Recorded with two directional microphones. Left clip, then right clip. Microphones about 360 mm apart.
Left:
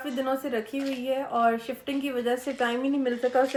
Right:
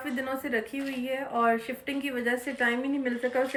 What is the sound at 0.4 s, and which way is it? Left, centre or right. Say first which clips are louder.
A woman's voice: left 1 dB; centre.